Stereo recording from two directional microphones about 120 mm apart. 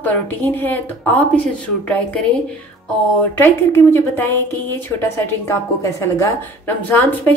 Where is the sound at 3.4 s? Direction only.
20° left (ahead or behind).